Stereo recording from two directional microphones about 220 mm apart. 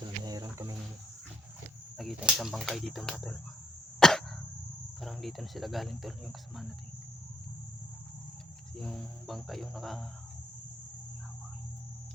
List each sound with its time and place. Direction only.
0.0 s a sound: 15° right (ahead or behind)
2.0 s speech: centre (ahead or behind)
4.0 s cough: centre (ahead or behind)
4.9 s speech: centre (ahead or behind)
8.7 s speech: centre (ahead or behind)